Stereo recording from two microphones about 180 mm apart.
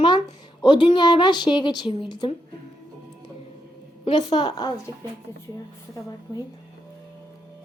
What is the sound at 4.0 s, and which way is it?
Speech, 30° left (ahead or behind).